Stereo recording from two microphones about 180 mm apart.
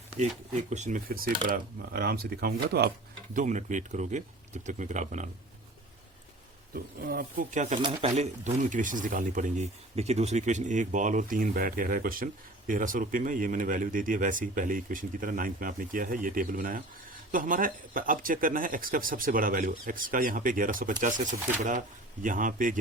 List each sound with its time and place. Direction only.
0.2 s speech: 40° right (ahead or behind); by 2.9 s 60° right (ahead or behind)
3.3 s speech: 45° right (ahead or behind)
6.7 s speech: 55° right (ahead or behind)